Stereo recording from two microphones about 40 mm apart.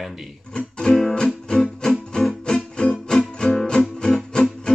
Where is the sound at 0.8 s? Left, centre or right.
Centre.